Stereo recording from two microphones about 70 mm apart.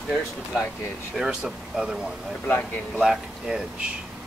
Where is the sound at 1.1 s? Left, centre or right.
Centre.